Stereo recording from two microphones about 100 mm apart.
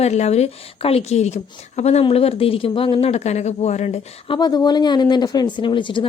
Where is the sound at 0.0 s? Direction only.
90° left.